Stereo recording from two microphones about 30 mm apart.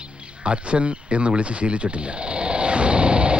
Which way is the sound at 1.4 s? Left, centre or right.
Right.